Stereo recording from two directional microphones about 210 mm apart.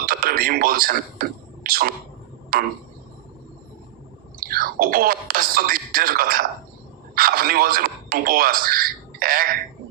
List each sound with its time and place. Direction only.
0.0 s speech: 45° right (ahead or behind)
4.4 s speech: 45° right (ahead or behind)